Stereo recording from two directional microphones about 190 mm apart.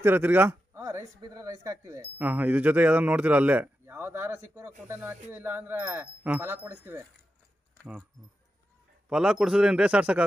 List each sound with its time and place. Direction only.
0.0 s a man's voice: 10° right (ahead or behind)
9.1 s speech: 5° right (ahead or behind)